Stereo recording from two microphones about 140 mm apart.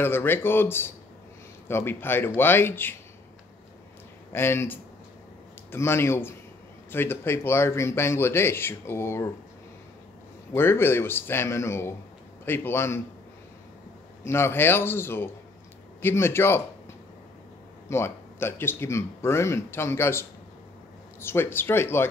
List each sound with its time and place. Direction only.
0.0 s speech: 15° left (ahead or behind)
4.3 s speech: 15° left (ahead or behind)
10.5 s speech: 15° left (ahead or behind)
14.2 s speech: 20° left (ahead or behind)
17.8 s speech: 20° left (ahead or behind)